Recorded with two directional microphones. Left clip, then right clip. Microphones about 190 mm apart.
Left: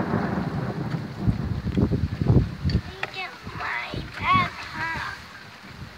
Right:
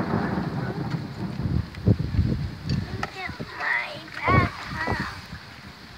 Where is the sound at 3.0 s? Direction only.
40° right (ahead or behind).